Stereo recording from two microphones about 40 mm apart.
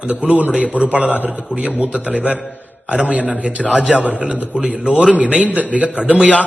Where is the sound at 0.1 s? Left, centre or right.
Right.